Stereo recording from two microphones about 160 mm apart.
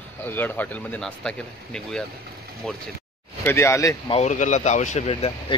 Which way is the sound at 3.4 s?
15° left (ahead or behind).